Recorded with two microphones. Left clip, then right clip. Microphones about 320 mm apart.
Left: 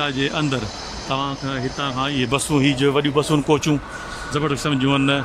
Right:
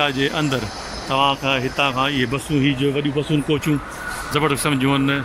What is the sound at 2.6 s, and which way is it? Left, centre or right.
Speech, centre.